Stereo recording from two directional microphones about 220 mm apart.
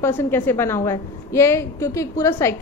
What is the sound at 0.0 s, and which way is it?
A woman's voice, 10° left (ahead or behind).